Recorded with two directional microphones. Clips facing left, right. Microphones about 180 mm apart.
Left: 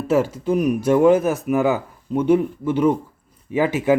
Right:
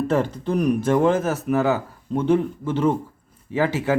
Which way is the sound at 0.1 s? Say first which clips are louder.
Left 3 dB; 10° left (ahead or behind).